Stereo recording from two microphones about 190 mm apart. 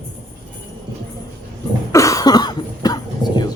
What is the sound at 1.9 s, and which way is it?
Cough, 15° left (ahead or behind).